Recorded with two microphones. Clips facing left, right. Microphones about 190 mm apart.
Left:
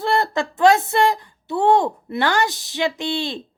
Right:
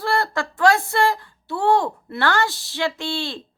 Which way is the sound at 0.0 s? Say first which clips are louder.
Left 2 dB; 20° left (ahead or behind).